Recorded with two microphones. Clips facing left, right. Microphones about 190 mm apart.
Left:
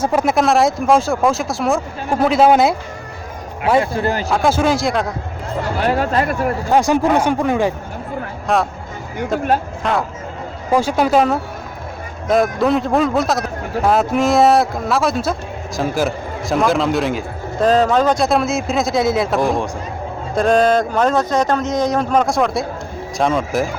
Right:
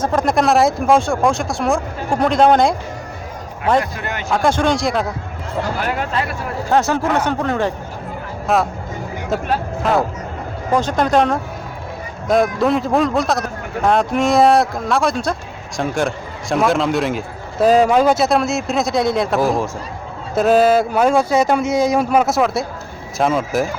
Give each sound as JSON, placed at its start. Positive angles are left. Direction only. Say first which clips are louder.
{"t": 0.0, "sound": "a man's voice", "louder": "left 1 dB", "side_deg": 10}
{"t": 3.8, "sound": "speech", "louder": "left 4 dB", "side_deg": 30}
{"t": 4.3, "sound": "a man's voice", "louder": "right 2 dB", "side_deg": 5}
{"t": 5.8, "sound": "speech", "louder": "left 4 dB", "side_deg": 35}
{"t": 6.7, "sound": "speech", "louder": "left 2 dB", "side_deg": 15}
{"t": 8.5, "sound": "a man's voice", "louder": "even", "side_deg": 0}
{"t": 9.8, "sound": "a man's voice", "louder": "right 2 dB", "side_deg": -5}
{"t": 10.7, "sound": "a man's voice", "louder": "left 1 dB", "side_deg": 10}